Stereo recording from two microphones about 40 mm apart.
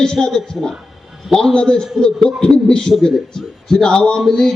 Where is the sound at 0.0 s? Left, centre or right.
Centre.